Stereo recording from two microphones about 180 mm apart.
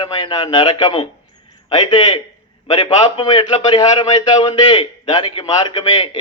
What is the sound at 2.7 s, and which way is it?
A man's voice, 25° left (ahead or behind).